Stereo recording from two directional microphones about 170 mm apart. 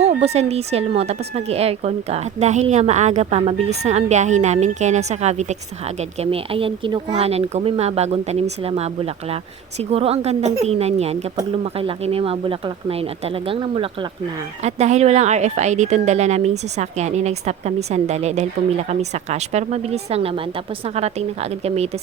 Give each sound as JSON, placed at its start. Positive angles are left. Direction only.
{"t": 0.0, "sound": "speech", "side_deg": -40}
{"t": 14.6, "sound": "speech", "side_deg": -40}